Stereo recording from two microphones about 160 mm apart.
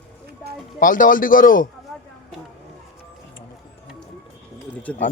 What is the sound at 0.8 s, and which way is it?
Speech, 55° left (ahead or behind).